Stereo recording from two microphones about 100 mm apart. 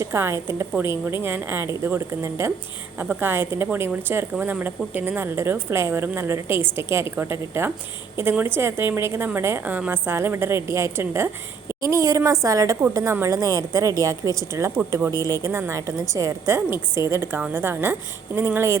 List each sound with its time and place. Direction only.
0.0 s a woman's voice: 25° right (ahead or behind)